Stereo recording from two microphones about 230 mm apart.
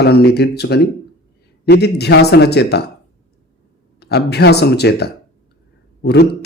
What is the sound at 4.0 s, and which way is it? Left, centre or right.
Speech, left.